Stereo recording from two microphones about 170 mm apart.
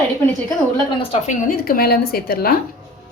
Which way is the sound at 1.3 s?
55° left (ahead or behind).